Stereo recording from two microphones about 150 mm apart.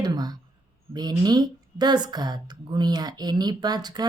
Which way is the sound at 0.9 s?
30° right (ahead or behind).